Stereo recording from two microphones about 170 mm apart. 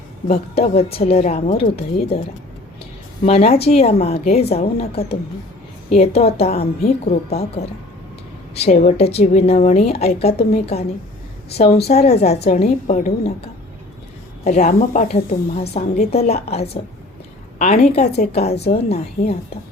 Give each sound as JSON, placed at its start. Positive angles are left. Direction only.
{"t": 0.3, "sound": "a woman's voice", "side_deg": 35}
{"t": 3.2, "sound": "a woman's voice", "side_deg": 40}
{"t": 14.4, "sound": "a woman's voice", "side_deg": 45}